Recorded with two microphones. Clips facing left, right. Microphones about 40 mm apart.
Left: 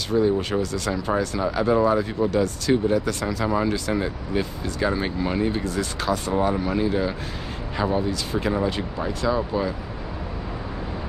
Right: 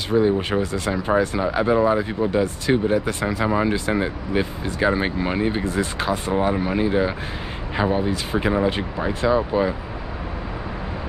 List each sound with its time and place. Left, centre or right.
0.1 s speech: right